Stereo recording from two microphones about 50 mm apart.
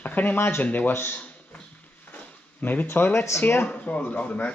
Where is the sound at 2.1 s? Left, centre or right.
Left.